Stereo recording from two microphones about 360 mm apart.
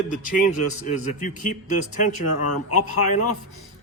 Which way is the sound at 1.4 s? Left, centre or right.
Left.